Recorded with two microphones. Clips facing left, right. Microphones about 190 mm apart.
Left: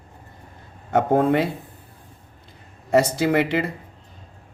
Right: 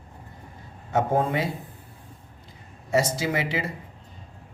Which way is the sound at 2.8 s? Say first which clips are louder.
Left 6 dB; 60° left (ahead or behind).